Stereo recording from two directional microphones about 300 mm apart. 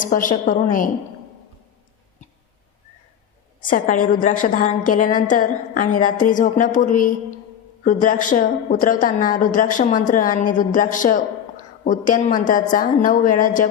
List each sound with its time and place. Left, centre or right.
0.0 s a woman's voice: left
3.7 s a woman's voice: left